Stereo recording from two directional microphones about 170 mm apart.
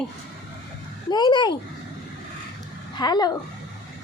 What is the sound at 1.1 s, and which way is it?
Speech, 25° left (ahead or behind).